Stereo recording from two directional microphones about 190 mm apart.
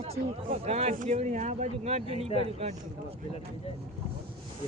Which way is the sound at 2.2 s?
30° left (ahead or behind).